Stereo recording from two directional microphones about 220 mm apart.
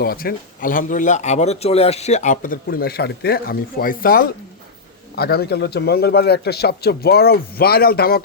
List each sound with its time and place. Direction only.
0.0 s a man's voice: 45° left (ahead or behind)